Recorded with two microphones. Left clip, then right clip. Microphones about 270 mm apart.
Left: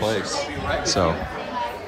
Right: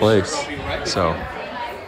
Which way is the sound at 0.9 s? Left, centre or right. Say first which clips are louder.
Right 1 dB; centre.